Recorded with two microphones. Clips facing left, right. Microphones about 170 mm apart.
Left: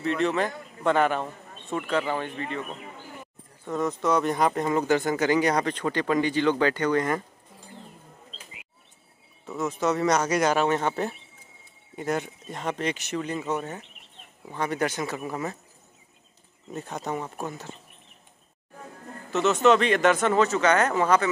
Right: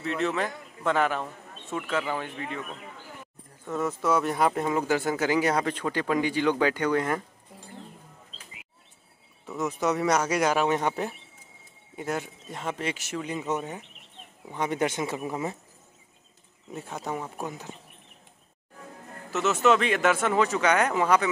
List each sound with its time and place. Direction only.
0.0 s speech: centre (ahead or behind)
3.6 s speech: 5° right (ahead or behind)
9.6 s speech: 15° right (ahead or behind)
16.7 s speech: 5° right (ahead or behind)
19.3 s speech: 5° right (ahead or behind)